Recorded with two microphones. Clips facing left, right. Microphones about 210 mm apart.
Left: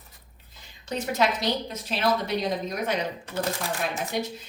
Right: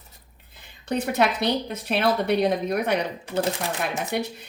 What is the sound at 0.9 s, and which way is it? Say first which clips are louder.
A woman's voice: right 3 dB; 60° right (ahead or behind).